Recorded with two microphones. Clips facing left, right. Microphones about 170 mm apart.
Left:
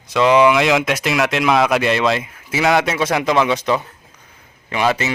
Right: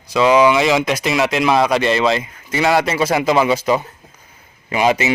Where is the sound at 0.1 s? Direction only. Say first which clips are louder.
Even; centre (ahead or behind).